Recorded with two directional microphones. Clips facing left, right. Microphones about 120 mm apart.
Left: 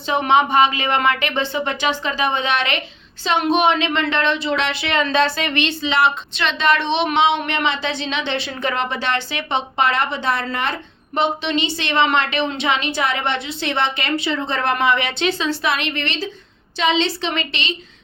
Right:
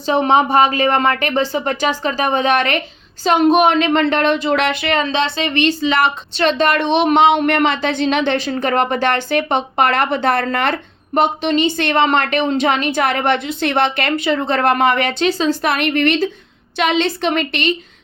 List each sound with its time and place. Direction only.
0.0 s a woman's voice: 35° right (ahead or behind)
5.1 s a woman's voice: 25° right (ahead or behind); by 17.7 s 50° right (ahead or behind)